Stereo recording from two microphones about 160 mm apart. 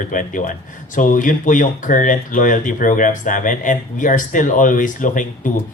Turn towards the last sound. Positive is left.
turn(degrees=55)  # may be behind; listen again after turning